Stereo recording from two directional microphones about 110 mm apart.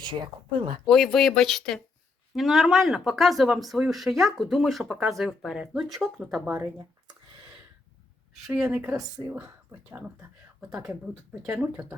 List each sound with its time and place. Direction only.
0.0 s speech: 45° right (ahead or behind)
0.9 s speech: 5° left (ahead or behind)
8.5 s speech: 10° right (ahead or behind)
11.5 s speech: 15° right (ahead or behind)